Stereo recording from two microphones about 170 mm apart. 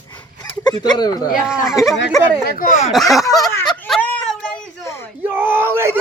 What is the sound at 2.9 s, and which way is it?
Speech, centre (ahead or behind).